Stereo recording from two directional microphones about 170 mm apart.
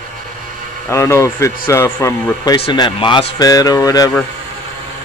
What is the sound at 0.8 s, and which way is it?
A man's voice, 15° left (ahead or behind).